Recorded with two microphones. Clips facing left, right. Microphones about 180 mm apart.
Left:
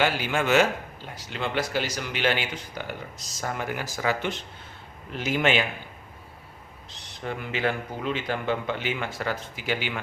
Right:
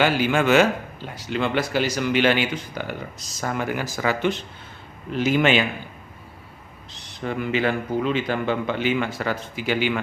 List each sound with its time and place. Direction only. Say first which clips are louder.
0.0 s a man's voice: right 5 dB; 90° right
1.3 s speech: right 5 dB; 75° right (ahead or behind)
3.4 s a man's voice: right 5 dB; 90° right
7.3 s a man's voice: right 5 dB; 90° right